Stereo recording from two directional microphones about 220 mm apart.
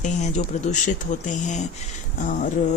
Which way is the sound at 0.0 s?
30° left (ahead or behind).